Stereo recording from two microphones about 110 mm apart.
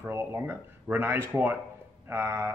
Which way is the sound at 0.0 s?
25° right (ahead or behind).